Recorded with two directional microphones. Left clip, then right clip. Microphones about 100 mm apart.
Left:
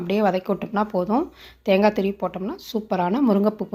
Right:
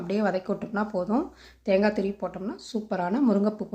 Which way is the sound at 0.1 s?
20° left (ahead or behind).